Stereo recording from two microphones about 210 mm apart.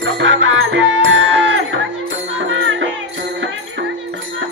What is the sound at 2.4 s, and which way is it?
Music, 65° right (ahead or behind).